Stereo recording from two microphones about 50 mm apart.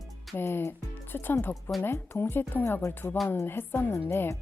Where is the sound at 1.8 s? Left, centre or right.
Left.